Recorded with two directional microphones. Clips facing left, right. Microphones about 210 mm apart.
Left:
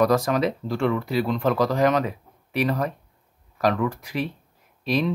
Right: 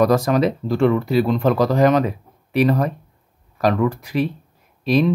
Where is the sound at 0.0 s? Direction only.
35° right (ahead or behind).